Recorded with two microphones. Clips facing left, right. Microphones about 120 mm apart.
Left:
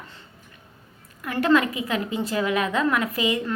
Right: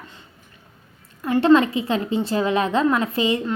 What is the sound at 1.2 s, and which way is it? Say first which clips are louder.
A woman's voice: right 5 dB; 25° right (ahead or behind).